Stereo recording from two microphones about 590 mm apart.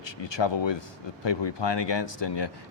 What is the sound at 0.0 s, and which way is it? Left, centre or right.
Speech, left.